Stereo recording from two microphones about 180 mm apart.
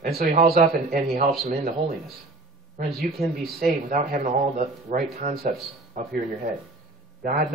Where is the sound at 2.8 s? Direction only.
Centre (ahead or behind).